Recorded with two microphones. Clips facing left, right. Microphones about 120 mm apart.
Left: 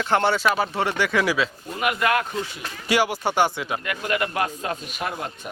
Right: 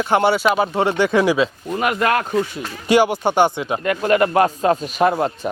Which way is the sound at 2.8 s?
20° right (ahead or behind).